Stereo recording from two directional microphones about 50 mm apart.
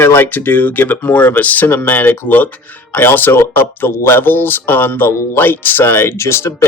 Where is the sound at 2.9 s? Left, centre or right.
Left.